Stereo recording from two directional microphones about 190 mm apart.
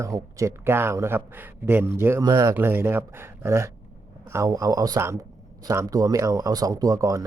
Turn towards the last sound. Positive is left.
turn(degrees=-15)  # may be behind; listen again after turning